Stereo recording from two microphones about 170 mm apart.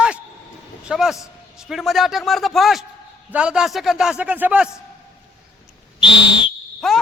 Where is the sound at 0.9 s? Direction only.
5° right (ahead or behind).